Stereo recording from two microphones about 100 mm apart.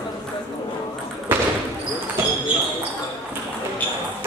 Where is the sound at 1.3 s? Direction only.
20° right (ahead or behind).